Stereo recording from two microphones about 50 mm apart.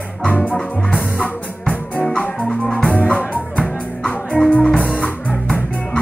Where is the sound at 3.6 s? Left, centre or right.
Centre.